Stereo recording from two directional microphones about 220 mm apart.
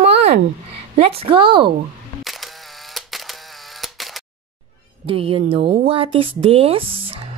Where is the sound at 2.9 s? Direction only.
Centre (ahead or behind).